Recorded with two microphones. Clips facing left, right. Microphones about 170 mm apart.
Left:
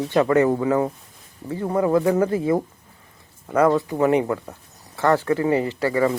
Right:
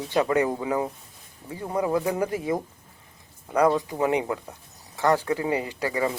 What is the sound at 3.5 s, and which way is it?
Speech, 15° right (ahead or behind).